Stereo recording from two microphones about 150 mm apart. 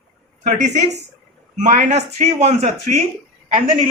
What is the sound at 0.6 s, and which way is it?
Speech, 50° right (ahead or behind).